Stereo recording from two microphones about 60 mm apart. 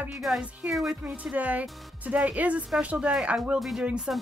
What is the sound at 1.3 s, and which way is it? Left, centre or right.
Speech, right.